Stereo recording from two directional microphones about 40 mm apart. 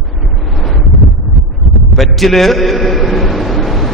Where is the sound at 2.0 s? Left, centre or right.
Centre.